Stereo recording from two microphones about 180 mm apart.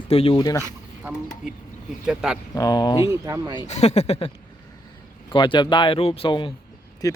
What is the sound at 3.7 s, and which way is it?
Speech, 35° left (ahead or behind).